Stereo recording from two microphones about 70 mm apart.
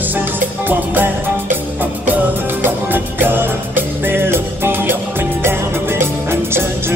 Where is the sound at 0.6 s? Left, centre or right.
Right.